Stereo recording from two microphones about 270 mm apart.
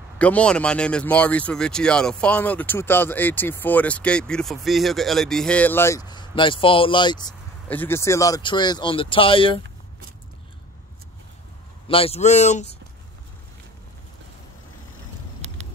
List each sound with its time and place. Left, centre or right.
0.2 s speech: centre
11.9 s speech: left